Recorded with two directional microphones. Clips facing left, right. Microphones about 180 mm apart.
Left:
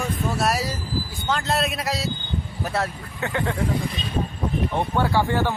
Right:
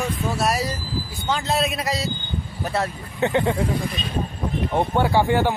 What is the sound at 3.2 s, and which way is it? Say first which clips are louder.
Speech: right 6 dB; 20° right (ahead or behind).